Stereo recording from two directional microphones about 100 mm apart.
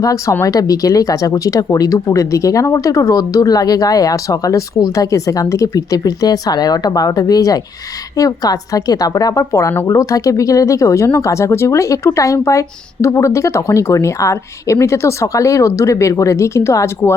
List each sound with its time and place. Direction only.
0.0 s a woman's voice: 35° left (ahead or behind)